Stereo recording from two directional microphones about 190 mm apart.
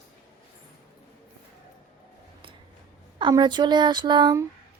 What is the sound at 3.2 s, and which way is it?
Speech, 25° right (ahead or behind).